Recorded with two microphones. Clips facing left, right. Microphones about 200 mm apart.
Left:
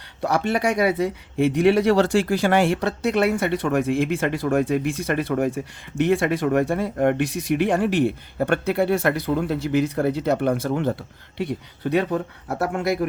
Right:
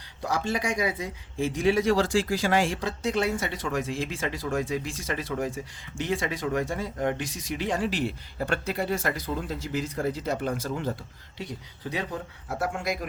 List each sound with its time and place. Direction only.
0.2 s speech: 65° left (ahead or behind)